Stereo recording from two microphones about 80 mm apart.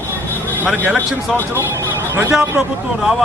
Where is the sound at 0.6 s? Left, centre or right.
Right.